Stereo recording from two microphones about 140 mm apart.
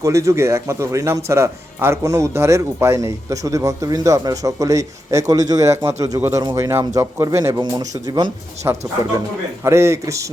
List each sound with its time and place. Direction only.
0.0 s a man's voice: 20° right (ahead or behind)